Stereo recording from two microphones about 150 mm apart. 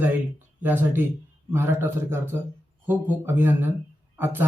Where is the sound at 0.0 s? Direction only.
15° right (ahead or behind).